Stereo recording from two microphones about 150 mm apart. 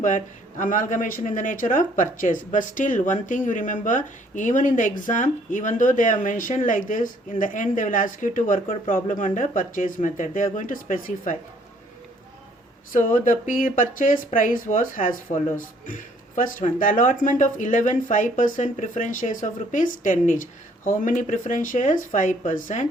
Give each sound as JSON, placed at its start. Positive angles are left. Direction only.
{"t": 0.0, "sound": "speech", "side_deg": 60}
{"t": 12.9, "sound": "speech", "side_deg": 60}